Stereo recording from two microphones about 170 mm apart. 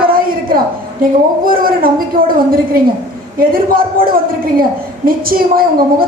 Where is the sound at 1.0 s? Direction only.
55° right (ahead or behind).